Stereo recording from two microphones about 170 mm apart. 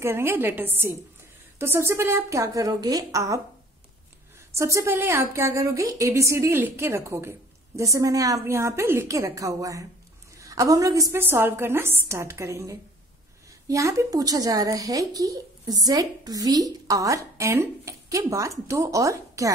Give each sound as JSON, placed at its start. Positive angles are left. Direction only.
{"t": 0.0, "sound": "a woman's voice", "side_deg": -15}
{"t": 4.5, "sound": "a woman's voice", "side_deg": -15}